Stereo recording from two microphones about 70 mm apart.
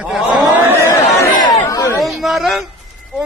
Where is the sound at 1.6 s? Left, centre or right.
Left.